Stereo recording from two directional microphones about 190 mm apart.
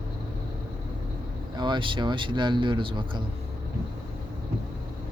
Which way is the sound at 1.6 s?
25° right (ahead or behind).